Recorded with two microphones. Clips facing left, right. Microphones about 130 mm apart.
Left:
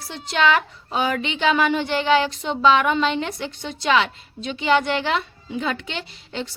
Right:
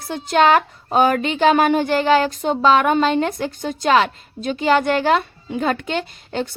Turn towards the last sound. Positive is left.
turn(degrees=-50)  # may be behind; listen again after turning